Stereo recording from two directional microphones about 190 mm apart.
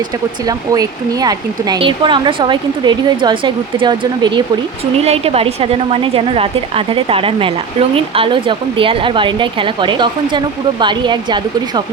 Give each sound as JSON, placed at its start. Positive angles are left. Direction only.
{"t": 0.4, "sound": "speech", "side_deg": -20}